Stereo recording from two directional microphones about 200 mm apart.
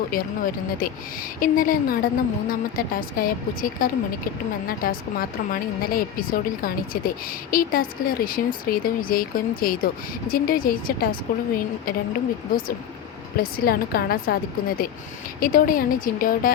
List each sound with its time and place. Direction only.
0.1 s speech: 45° left (ahead or behind)
13.3 s speech: 50° left (ahead or behind)
15.4 s speech: 45° left (ahead or behind)